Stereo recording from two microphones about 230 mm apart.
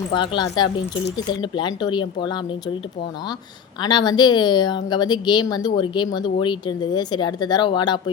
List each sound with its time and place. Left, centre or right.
0.1 s speech: left
3.8 s speech: centre